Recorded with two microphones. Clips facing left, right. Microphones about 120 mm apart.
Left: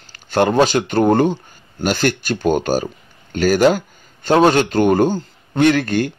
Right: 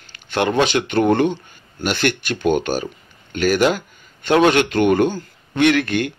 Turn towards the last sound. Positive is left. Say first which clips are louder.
# left 2 dB
turn(degrees=35)  # may be behind; listen again after turning